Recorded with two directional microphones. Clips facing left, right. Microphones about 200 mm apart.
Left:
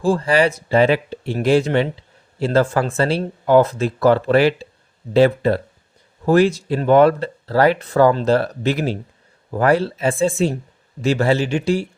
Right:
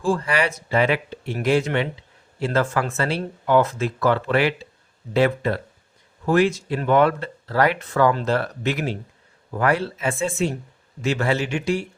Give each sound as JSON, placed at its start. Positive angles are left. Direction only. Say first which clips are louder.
{"t": 0.0, "sound": "speech", "louder": "left 5 dB", "side_deg": 35}